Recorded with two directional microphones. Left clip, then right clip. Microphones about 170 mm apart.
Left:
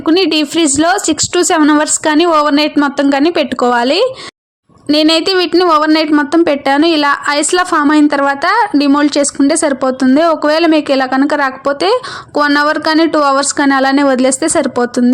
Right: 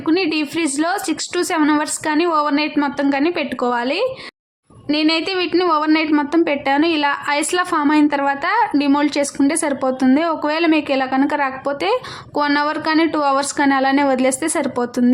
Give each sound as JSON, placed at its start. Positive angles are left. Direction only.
{"t": 0.0, "sound": "a woman's voice", "side_deg": 35}